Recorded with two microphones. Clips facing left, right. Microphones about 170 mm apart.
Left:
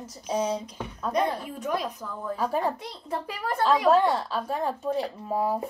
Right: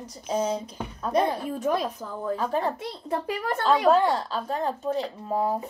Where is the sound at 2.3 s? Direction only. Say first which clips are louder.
Even; 5° left (ahead or behind).